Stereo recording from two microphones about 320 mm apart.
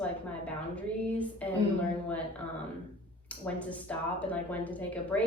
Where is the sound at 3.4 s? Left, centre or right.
Centre.